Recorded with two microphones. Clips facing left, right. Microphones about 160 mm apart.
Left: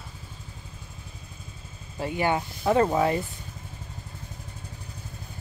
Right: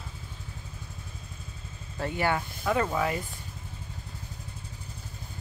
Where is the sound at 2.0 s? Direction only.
20° left (ahead or behind).